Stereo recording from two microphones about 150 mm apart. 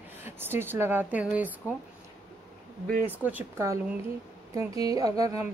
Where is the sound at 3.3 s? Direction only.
15° right (ahead or behind).